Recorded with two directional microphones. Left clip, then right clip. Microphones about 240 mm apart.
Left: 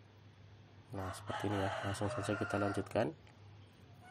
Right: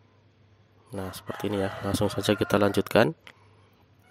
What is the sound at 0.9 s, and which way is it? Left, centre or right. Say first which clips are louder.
Speech: right 6 dB; right.